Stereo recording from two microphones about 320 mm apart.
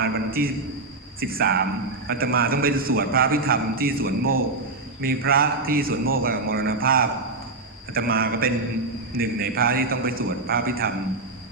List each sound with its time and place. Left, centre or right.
0.0 s a man's voice: right